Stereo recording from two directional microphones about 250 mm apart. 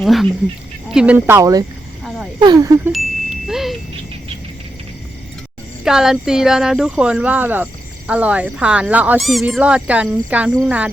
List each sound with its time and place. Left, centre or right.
0.0 s speech: centre
3.4 s speech: centre
5.8 s speech: centre